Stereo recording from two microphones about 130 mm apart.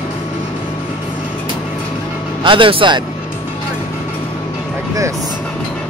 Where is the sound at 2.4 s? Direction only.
40° right (ahead or behind).